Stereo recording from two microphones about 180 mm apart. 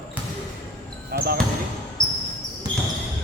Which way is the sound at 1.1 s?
55° right (ahead or behind).